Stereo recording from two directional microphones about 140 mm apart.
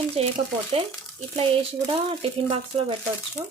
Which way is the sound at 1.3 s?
45° right (ahead or behind).